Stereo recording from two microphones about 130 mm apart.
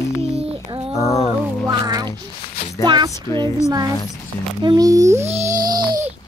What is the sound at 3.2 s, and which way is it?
Speech, 25° left (ahead or behind).